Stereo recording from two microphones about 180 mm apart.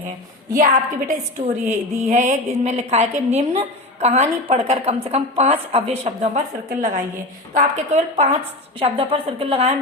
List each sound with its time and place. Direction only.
0.5 s a woman's voice: 45° right (ahead or behind)
6.7 s a woman's voice: 45° right (ahead or behind)